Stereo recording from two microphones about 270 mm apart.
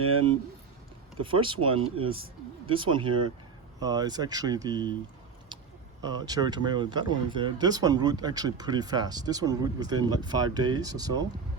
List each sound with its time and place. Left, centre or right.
1.2 s speech: centre
6.2 s speech: centre